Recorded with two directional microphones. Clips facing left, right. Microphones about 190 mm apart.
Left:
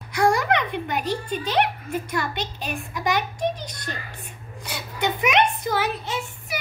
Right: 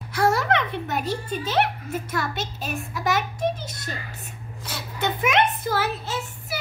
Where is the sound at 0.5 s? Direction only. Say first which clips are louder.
Even; 15° left (ahead or behind).